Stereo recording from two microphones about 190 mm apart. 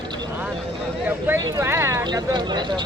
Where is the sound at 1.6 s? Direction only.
15° right (ahead or behind).